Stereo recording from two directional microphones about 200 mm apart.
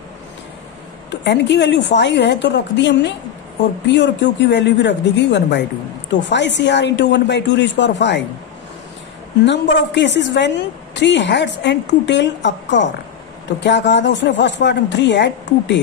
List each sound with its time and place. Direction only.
1.1 s speech: 60° left (ahead or behind)
9.5 s speech: 60° left (ahead or behind)